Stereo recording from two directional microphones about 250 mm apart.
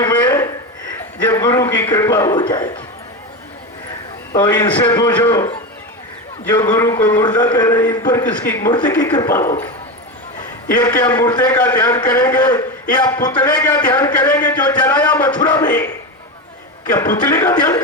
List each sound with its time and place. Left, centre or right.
0.0 s a sound: centre
1.3 s a man's voice: centre
4.4 s a man's voice: centre
10.8 s a man's voice: centre
14.9 s a man's voice: centre
17.0 s a man's voice: centre